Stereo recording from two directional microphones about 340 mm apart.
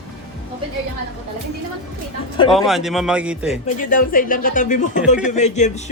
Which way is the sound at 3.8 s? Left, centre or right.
Left.